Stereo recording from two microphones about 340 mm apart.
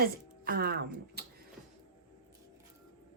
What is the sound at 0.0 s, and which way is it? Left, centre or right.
A woman's voice, right.